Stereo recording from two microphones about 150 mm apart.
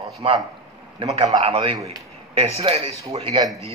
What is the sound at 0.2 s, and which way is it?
A man's voice, 35° right (ahead or behind).